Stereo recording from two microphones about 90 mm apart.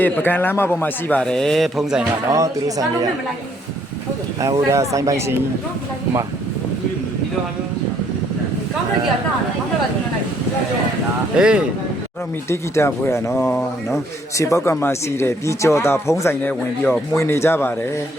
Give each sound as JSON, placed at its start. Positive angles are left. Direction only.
{"t": 0.0, "sound": "speech", "side_deg": 20}
{"t": 1.2, "sound": "speech", "side_deg": 5}
{"t": 2.3, "sound": "speech", "side_deg": -40}
{"t": 4.4, "sound": "speech", "side_deg": -40}
{"t": 11.3, "sound": "speech", "side_deg": -10}
{"t": 12.5, "sound": "speech", "side_deg": 30}
{"t": 16.4, "sound": "speech", "side_deg": 20}
{"t": 17.2, "sound": "speech", "side_deg": 30}